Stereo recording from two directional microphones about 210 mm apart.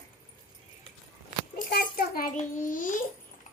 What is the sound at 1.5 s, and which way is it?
A child's voice, 50° left (ahead or behind).